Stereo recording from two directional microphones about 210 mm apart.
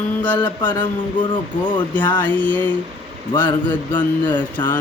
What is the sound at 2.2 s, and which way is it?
Mantra, 10° left (ahead or behind).